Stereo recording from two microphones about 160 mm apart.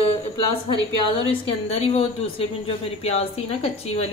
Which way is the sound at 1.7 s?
40° left (ahead or behind).